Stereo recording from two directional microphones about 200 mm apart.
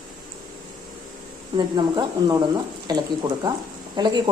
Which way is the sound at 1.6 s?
20° right (ahead or behind).